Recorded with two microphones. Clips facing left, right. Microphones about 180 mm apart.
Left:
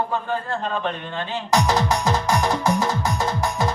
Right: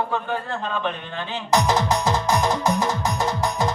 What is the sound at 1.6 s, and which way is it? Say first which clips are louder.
Music: even; 20° right (ahead or behind).